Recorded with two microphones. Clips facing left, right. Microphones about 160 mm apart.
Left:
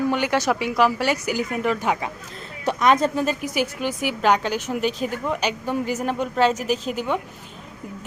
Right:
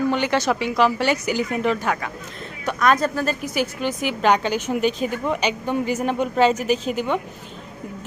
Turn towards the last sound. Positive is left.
turn(degrees=5)  # may be behind; listen again after turning